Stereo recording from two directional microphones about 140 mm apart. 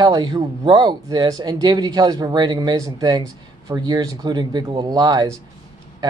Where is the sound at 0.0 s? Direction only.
30° right (ahead or behind).